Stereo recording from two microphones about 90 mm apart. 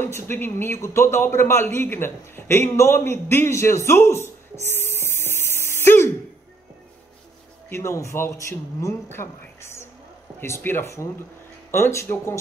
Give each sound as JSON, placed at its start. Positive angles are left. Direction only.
{"t": 0.0, "sound": "a man's voice", "side_deg": 25}
{"t": 3.0, "sound": "a sound", "side_deg": 25}
{"t": 7.7, "sound": "a man's voice", "side_deg": 35}